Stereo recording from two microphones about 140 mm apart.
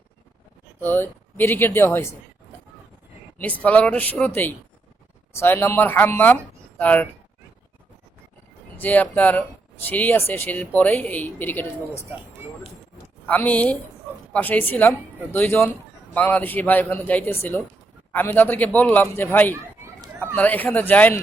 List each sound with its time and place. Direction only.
0.8 s speech: 15° left (ahead or behind)
3.4 s speech: 10° left (ahead or behind)
8.8 s speech: 10° left (ahead or behind)
13.2 s speech: 10° left (ahead or behind)